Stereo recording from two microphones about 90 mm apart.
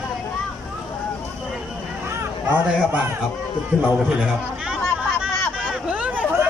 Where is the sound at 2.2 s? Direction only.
20° right (ahead or behind).